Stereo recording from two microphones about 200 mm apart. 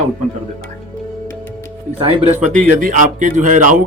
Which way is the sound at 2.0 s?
30° right (ahead or behind).